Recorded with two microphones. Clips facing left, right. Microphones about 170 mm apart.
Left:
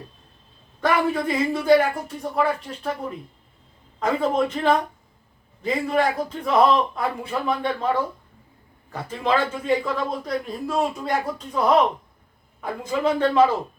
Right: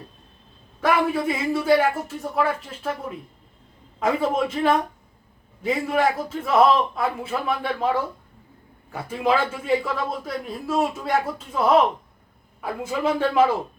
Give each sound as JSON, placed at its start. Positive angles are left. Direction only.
{"t": 0.8, "sound": "a man's voice", "side_deg": -5}
{"t": 4.0, "sound": "a man's voice", "side_deg": -5}
{"t": 8.9, "sound": "a man's voice", "side_deg": -10}
{"t": 12.6, "sound": "a man's voice", "side_deg": -5}